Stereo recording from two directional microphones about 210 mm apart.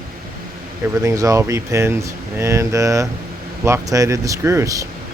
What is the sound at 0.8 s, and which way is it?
Speech, 15° right (ahead or behind).